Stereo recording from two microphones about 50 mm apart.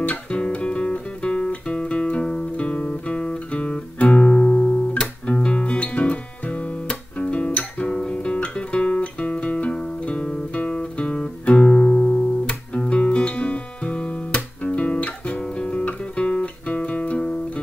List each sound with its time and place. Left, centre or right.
0.0 s music: left
12.7 s guitar: left